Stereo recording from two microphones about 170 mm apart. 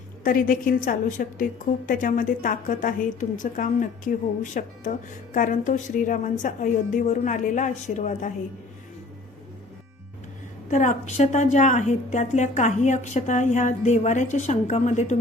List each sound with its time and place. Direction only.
0.3 s a woman's voice: 55° left (ahead or behind)
10.7 s a woman's voice: 45° left (ahead or behind)